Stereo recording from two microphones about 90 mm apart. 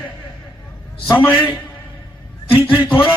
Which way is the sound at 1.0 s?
20° left (ahead or behind).